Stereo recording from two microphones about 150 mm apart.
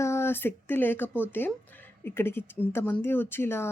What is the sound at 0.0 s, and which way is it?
Speech, 15° left (ahead or behind).